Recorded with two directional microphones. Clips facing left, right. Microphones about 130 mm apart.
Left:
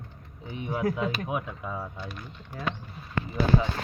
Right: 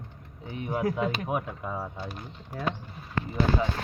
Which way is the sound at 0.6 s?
30° right (ahead or behind).